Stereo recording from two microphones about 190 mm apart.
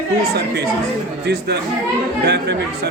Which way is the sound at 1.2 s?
60° right (ahead or behind).